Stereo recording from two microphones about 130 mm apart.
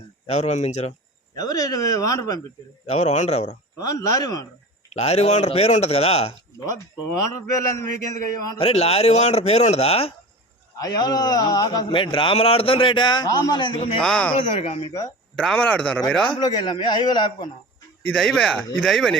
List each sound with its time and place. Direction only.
0.3 s speech: 60° left (ahead or behind)
1.4 s speech: 30° left (ahead or behind)
2.8 s speech: 55° left (ahead or behind)
3.8 s speech: 25° left (ahead or behind)
4.9 s a man's voice: 55° left (ahead or behind)
7.8 s speech: 25° left (ahead or behind)
8.5 s a man's voice: 50° left (ahead or behind)
10.8 s a man's voice: 30° left (ahead or behind)
14.0 s speech: 5° left (ahead or behind)
14.6 s a man's voice: 45° left (ahead or behind)
15.4 s speech: 10° left (ahead or behind)
16.3 s a man's voice: 35° left (ahead or behind)
18.1 s speech: 5° left (ahead or behind)